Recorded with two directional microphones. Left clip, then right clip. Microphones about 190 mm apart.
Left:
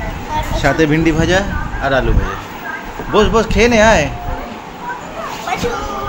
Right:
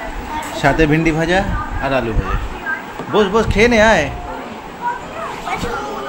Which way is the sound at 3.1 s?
Centre (ahead or behind).